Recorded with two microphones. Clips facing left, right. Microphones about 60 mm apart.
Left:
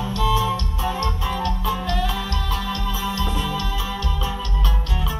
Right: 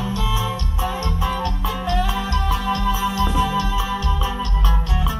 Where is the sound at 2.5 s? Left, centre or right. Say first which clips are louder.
Right 7 dB; centre.